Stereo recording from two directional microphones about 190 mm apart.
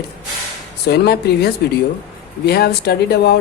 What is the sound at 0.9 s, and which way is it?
Speech, 55° left (ahead or behind).